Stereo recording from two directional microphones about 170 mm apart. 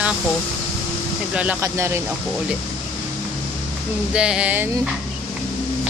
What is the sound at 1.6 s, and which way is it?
Speech, 15° right (ahead or behind).